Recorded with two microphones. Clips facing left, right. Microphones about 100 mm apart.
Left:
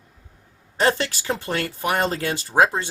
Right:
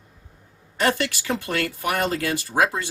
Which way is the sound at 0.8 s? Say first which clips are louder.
Left 2 dB; 30° left (ahead or behind).